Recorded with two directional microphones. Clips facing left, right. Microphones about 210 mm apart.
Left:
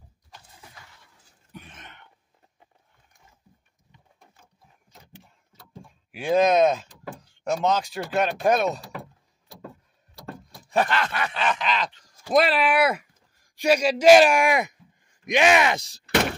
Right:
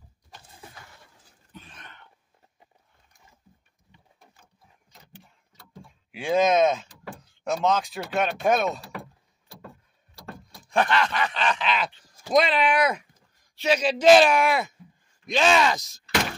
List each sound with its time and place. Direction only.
1.5 s a sound: 20° left (ahead or behind)
6.1 s speech: centre (ahead or behind)
10.5 s speech: 5° left (ahead or behind)
15.7 s speech: 30° left (ahead or behind)